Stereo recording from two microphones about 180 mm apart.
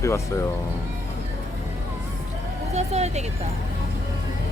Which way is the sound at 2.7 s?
35° right (ahead or behind).